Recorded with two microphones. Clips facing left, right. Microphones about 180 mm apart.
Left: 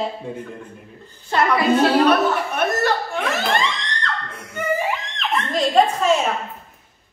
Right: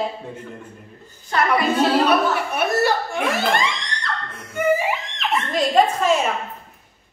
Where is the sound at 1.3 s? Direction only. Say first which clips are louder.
Left 2 dB; 25° left (ahead or behind).